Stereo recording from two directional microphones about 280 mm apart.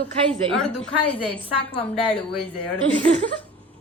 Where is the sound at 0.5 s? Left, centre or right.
Centre.